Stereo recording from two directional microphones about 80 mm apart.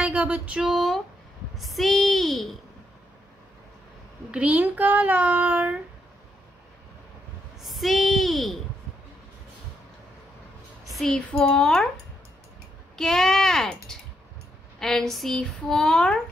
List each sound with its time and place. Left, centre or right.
0.0 s a sound: centre
1.6 s speech: centre
4.3 s a child's voice: centre
7.6 s a woman's voice: centre
11.3 s speech: centre
12.9 s speech: centre